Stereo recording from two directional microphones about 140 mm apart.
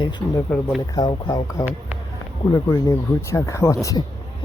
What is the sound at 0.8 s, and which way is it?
Speech, 30° left (ahead or behind).